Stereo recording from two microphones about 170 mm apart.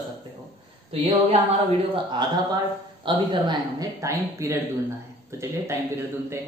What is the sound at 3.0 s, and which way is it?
Speech, 25° right (ahead or behind).